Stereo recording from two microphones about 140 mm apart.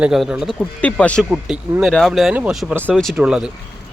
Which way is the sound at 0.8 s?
10° left (ahead or behind).